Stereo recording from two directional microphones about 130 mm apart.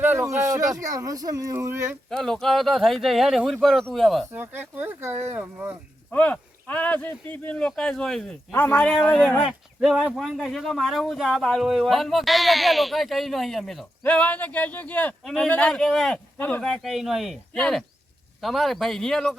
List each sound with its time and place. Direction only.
0.0 s a sound: 20° right (ahead or behind)
0.4 s speech: 25° right (ahead or behind)
2.0 s speech: 5° left (ahead or behind)
4.3 s speech: 15° right (ahead or behind)
6.1 s speech: 10° left (ahead or behind)
8.5 s speech: 15° left (ahead or behind)
14.0 s speech: 10° left (ahead or behind)
16.8 s speech: centre (ahead or behind)